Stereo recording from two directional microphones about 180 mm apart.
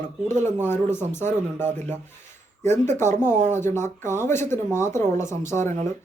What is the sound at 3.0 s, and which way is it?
Speech, 15° left (ahead or behind).